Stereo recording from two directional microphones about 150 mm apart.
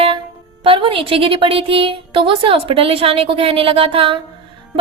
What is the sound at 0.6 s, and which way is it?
A woman's voice, 35° right (ahead or behind).